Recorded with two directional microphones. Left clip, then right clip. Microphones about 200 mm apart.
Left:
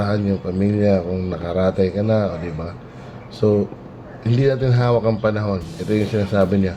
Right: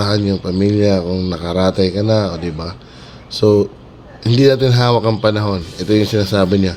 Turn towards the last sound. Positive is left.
turn(degrees=-55)  # may be behind; listen again after turning